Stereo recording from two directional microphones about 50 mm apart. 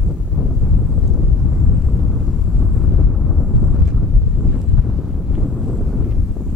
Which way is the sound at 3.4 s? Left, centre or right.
Centre.